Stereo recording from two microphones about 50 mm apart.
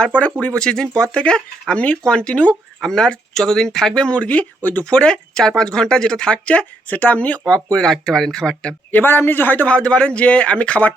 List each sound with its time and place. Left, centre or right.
0.2 s speech: left
2.8 s speech: centre; by 7.4 s left
7.4 s speech: centre
8.9 s a man's voice: left
9.6 s speech: left